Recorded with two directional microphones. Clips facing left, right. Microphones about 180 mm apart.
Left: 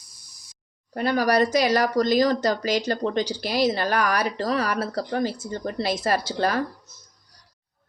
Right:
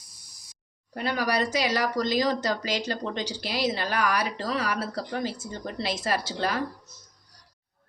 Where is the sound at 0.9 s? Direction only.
45° left (ahead or behind).